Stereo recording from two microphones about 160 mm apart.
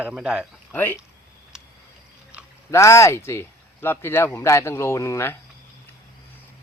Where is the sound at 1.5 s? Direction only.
5° right (ahead or behind).